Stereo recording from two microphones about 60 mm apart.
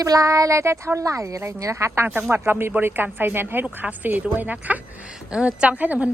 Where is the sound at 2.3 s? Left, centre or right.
Right.